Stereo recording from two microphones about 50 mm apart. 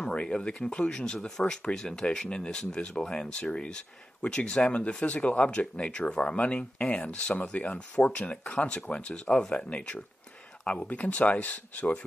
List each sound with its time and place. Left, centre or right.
0.1 s speech: left
9.3 s speech: centre
9.6 s speech: left